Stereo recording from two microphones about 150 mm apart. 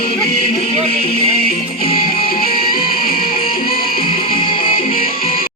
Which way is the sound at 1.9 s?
80° left.